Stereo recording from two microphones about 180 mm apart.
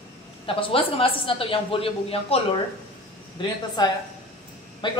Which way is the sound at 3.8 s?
20° left (ahead or behind).